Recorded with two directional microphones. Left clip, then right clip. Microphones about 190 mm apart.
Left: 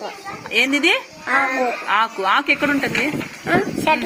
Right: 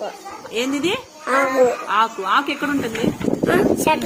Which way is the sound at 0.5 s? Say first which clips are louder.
Left 5 dB; 15° left (ahead or behind).